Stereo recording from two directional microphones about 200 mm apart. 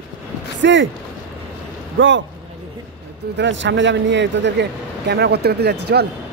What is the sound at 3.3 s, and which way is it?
Speech, 65° right (ahead or behind).